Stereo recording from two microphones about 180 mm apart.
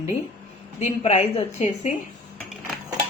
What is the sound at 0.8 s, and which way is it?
A woman's voice, 35° left (ahead or behind).